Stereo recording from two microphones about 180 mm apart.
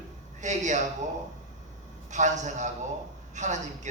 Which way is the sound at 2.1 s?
40° right (ahead or behind).